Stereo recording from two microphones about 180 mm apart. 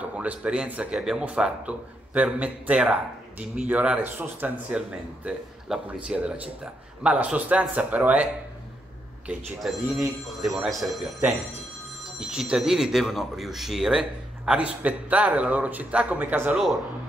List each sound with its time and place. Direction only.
0.2 s speech: 10° right (ahead or behind)
9.3 s speech: centre (ahead or behind)